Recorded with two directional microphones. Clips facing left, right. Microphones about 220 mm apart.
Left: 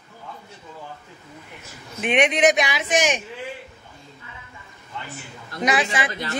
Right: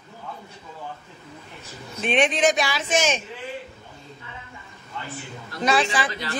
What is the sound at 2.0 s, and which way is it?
A man's voice, 20° left (ahead or behind).